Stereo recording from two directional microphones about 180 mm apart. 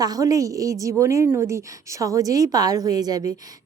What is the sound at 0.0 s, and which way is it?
A woman's voice, 20° right (ahead or behind).